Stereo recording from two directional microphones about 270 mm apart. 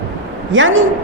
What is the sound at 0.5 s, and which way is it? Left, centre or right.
Speech, right.